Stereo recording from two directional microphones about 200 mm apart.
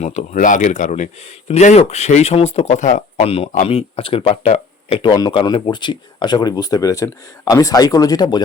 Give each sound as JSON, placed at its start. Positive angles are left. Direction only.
{"t": 0.0, "sound": "speech", "side_deg": 35}